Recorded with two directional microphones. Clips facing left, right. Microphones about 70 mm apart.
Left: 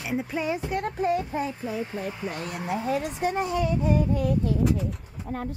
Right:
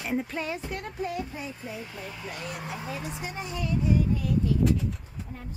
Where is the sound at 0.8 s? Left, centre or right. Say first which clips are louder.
Left 7 dB; left.